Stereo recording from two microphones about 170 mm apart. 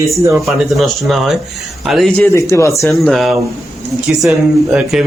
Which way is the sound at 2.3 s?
15° left (ahead or behind).